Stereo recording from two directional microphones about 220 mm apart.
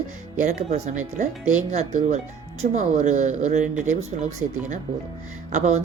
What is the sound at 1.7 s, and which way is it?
Speech, 30° right (ahead or behind).